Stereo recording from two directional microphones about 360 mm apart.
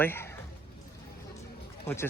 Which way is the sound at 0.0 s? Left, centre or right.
Centre.